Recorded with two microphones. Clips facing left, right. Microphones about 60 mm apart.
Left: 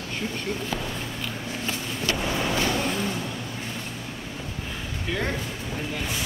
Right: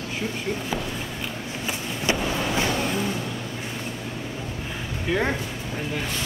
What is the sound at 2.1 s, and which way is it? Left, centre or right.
Vehicle, centre.